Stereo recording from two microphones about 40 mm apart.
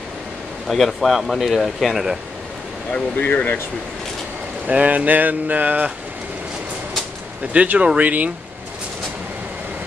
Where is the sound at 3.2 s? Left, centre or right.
Left.